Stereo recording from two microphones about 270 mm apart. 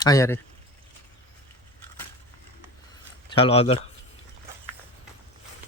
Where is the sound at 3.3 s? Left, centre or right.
Left.